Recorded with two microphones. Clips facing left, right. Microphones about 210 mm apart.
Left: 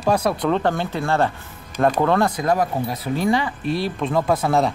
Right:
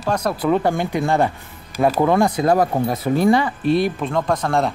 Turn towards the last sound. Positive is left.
turn(degrees=0)  # may be behind; listen again after turning